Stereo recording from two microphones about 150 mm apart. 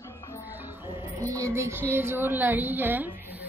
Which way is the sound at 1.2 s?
20° right (ahead or behind).